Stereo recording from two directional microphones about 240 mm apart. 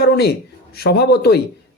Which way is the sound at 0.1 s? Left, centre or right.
Left.